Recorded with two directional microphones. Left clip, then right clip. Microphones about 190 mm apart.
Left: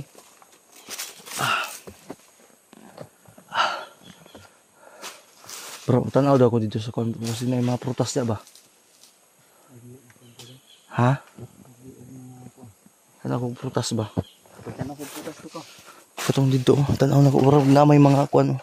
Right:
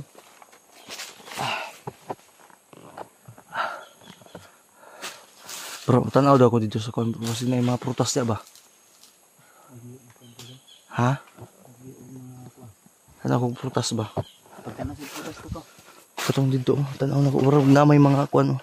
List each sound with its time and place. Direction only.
0.8 s walk: 15° left (ahead or behind)
1.4 s a sound: 35° left (ahead or behind)
3.4 s a sound: 50° left (ahead or behind)
5.9 s speech: centre (ahead or behind)
10.9 s speech: 20° left (ahead or behind)
13.2 s a sound: 20° right (ahead or behind)
13.7 s speech: 10° left (ahead or behind)
15.5 s speech: 35° left (ahead or behind)
16.3 s speech: 20° left (ahead or behind)
17.4 s speech: centre (ahead or behind)